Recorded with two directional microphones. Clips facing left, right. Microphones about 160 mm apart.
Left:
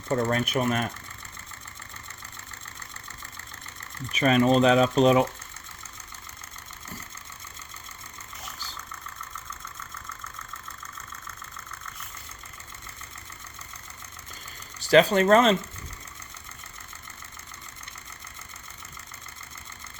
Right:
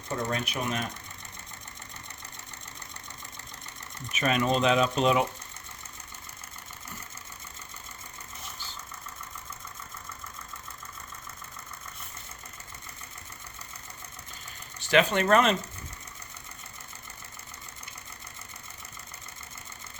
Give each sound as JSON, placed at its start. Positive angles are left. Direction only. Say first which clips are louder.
{"t": 0.3, "sound": "speech", "louder": "left 6 dB", "side_deg": 50}
{"t": 4.1, "sound": "speech", "louder": "left 6 dB", "side_deg": 35}
{"t": 14.8, "sound": "speech", "louder": "left 5 dB", "side_deg": 35}